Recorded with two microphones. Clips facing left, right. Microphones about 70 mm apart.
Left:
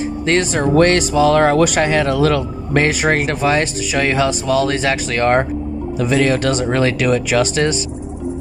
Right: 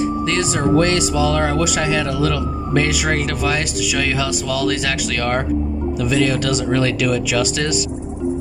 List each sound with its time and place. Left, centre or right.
0.3 s speech: left